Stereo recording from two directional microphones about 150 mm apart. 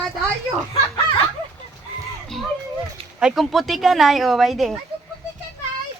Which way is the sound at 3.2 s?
5° right (ahead or behind).